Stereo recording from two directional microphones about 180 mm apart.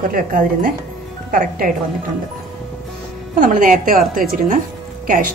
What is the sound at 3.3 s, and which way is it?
Speech, 50° right (ahead or behind).